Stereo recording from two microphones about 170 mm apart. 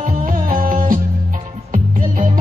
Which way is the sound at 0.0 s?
50° right (ahead or behind).